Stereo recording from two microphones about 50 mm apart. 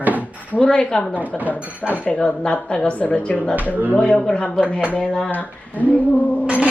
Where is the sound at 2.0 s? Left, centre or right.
Left.